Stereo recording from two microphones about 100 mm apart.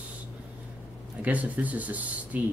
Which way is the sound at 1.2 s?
15° right (ahead or behind).